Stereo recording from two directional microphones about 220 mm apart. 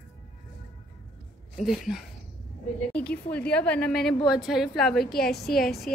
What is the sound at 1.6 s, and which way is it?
A woman's voice, centre (ahead or behind).